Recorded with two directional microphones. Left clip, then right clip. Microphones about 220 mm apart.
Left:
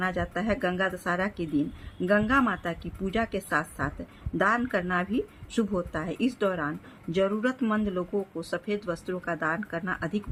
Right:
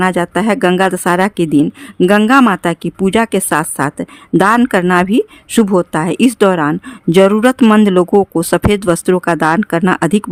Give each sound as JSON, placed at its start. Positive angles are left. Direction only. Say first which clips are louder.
{"t": 0.0, "sound": "speech", "louder": "right 16 dB", "side_deg": -55}